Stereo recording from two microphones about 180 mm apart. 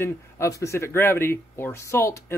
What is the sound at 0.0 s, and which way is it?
Speech, 15° left (ahead or behind).